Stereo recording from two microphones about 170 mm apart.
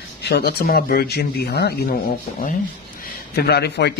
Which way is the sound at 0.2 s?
70° left (ahead or behind).